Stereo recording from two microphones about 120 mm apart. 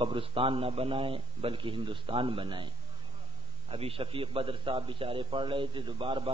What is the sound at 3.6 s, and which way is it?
A man's voice, 50° right (ahead or behind).